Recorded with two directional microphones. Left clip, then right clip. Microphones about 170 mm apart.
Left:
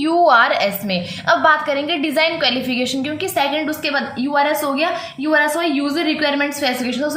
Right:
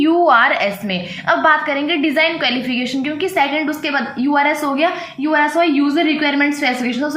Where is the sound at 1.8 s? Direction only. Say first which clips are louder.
Right 3 dB; 35° left (ahead or behind).